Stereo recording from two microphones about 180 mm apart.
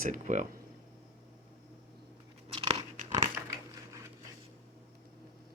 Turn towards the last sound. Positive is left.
turn(degrees=-20)  # may be behind; listen again after turning